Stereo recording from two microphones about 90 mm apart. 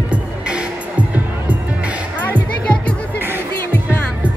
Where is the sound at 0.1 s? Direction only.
10° right (ahead or behind).